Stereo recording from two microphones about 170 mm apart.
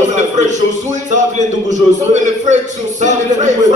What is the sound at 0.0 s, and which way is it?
Music, 45° right (ahead or behind).